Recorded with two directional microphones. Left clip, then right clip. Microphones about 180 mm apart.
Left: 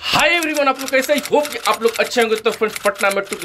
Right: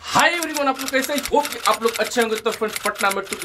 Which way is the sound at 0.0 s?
20° left (ahead or behind).